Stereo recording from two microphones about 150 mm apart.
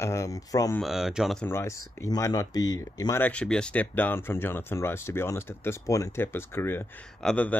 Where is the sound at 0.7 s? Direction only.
Centre (ahead or behind).